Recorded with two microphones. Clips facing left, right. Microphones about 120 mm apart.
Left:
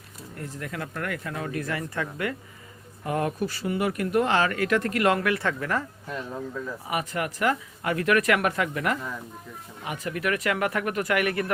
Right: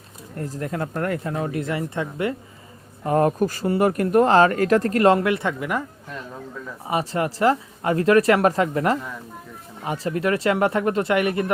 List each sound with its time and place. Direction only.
0.3 s speech: 40° right (ahead or behind)
3.0 s speech: 35° right (ahead or behind); by 5.8 s 15° right (ahead or behind)
6.8 s speech: 30° right (ahead or behind)